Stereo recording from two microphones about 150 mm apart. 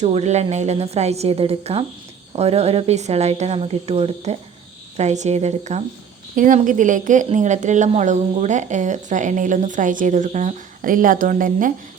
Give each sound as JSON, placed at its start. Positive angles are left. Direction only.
{"t": 0.0, "sound": "speech", "side_deg": -45}
{"t": 6.3, "sound": "a woman's voice", "side_deg": -60}